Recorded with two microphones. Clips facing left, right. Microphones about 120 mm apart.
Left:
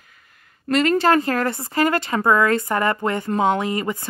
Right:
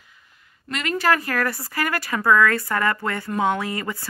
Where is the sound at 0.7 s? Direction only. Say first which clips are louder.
Left 6 dB; 35° left (ahead or behind).